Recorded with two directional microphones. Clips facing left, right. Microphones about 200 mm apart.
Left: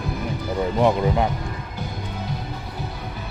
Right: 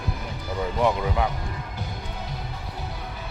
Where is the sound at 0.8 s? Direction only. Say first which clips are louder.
Left 4 dB; 30° left (ahead or behind).